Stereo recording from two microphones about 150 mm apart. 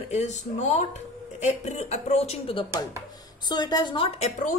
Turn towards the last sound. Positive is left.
turn(degrees=50)  # may be behind; listen again after turning